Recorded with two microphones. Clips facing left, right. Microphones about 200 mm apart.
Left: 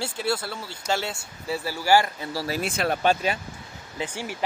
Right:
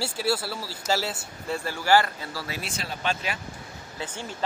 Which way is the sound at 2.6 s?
60° left (ahead or behind).